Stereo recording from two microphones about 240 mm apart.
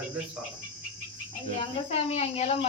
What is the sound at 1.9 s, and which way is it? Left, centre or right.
Speech, left.